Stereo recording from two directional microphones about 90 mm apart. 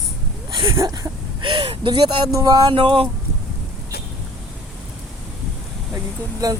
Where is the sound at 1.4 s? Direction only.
80° right.